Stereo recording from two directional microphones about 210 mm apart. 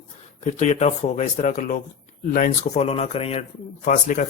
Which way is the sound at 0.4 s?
35° left (ahead or behind).